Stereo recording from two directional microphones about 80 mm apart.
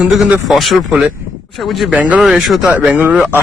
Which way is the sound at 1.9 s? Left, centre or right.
Centre.